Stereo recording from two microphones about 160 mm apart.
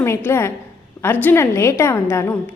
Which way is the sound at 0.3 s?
15° left (ahead or behind).